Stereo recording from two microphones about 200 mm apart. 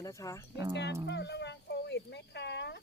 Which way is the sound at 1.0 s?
60° left (ahead or behind).